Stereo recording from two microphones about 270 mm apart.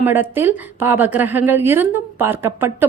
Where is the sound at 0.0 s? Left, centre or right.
Centre.